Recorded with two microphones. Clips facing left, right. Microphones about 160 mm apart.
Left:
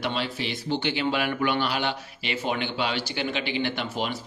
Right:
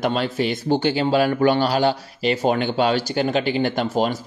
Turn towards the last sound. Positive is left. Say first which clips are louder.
# right 8 dB
turn(degrees=-40)  # may be behind; listen again after turning